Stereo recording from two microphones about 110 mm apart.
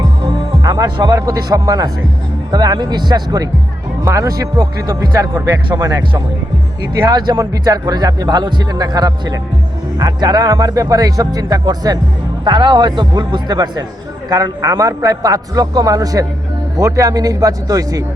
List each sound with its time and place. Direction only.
0.6 s music: 35° right (ahead or behind)
1.1 s speech: 35° right (ahead or behind)